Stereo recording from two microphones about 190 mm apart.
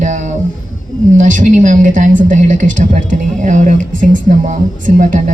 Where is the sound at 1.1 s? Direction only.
40° right (ahead or behind).